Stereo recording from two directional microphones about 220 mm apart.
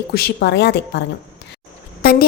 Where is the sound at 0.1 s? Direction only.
45° left (ahead or behind).